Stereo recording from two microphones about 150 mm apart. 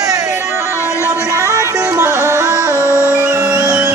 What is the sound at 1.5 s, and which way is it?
Music, 20° right (ahead or behind).